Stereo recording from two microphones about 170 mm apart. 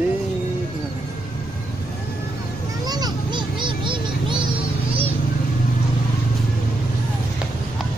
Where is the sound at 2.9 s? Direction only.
25° right (ahead or behind).